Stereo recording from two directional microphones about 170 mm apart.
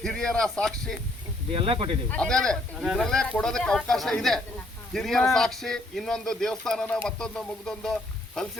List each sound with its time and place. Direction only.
0.0 s speech: 5° left (ahead or behind)
1.5 s speech: 30° right (ahead or behind)
2.0 s speech: 5° left (ahead or behind)